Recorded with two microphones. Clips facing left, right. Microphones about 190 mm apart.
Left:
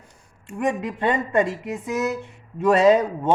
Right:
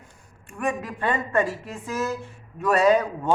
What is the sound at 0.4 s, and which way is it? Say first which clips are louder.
Speech: left 4 dB; 25° left (ahead or behind).